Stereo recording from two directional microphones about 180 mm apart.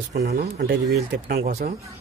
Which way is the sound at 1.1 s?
60° right (ahead or behind).